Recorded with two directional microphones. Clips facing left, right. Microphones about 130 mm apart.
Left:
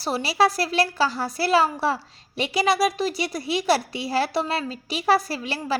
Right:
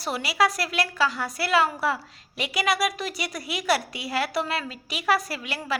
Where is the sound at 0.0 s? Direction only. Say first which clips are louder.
Left 3 dB; 35° left (ahead or behind).